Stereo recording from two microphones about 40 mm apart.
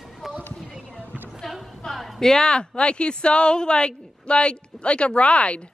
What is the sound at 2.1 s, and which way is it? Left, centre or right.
Speech, centre.